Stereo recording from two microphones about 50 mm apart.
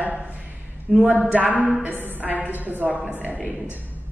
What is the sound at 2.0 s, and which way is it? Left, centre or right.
A man's voice, right.